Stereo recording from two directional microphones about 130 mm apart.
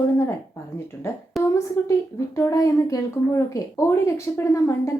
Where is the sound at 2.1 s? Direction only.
25° left (ahead or behind).